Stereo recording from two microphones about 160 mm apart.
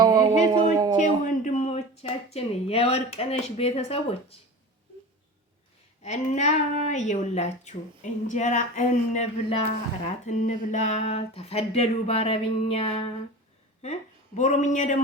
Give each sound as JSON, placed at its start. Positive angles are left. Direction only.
{"t": 0.0, "sound": "a sound", "side_deg": -25}
{"t": 1.2, "sound": "speech", "side_deg": 50}
{"t": 6.0, "sound": "a woman's voice", "side_deg": 45}
{"t": 14.3, "sound": "a woman's voice", "side_deg": 50}